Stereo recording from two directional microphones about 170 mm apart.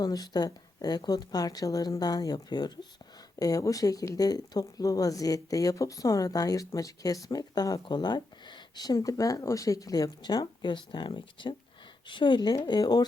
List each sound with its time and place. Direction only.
0.0 s speech: 20° left (ahead or behind)